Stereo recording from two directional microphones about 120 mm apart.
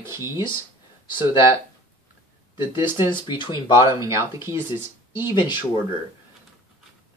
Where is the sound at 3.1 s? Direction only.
40° left (ahead or behind).